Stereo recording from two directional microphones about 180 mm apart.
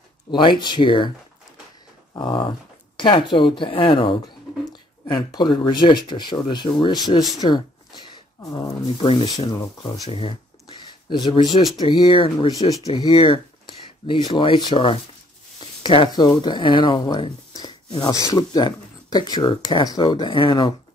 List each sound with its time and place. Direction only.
0.3 s speech: 25° left (ahead or behind)
2.1 s speech: 25° left (ahead or behind)
10.8 s a sound: 25° left (ahead or behind)
11.7 s speech: 25° left (ahead or behind)